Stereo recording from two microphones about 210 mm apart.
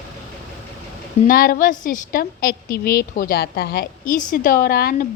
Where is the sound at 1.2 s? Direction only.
45° left (ahead or behind).